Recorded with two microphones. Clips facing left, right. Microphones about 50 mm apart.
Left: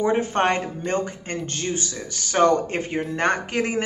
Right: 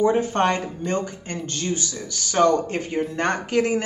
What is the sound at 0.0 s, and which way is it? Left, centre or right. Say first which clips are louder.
Speech: right 1 dB; left.